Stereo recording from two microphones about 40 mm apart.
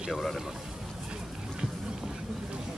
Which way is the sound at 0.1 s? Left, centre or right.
Centre.